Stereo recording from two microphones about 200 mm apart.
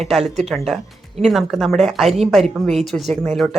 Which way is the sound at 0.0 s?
Centre (ahead or behind).